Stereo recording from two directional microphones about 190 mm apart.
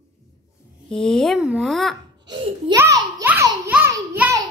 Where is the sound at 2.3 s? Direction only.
25° right (ahead or behind).